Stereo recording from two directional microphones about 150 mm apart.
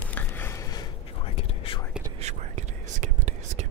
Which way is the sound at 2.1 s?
50° right (ahead or behind).